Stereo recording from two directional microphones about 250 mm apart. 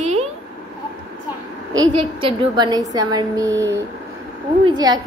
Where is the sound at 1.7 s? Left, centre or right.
Centre.